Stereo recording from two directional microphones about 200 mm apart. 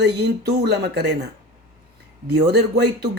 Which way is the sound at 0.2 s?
55° right (ahead or behind).